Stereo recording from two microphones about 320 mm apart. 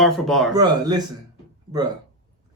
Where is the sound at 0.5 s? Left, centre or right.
Centre.